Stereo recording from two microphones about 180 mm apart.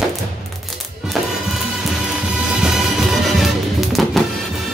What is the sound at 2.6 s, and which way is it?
Music, centre (ahead or behind).